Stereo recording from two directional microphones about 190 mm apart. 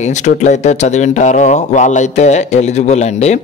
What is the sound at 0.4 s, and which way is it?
Speech, 40° left (ahead or behind).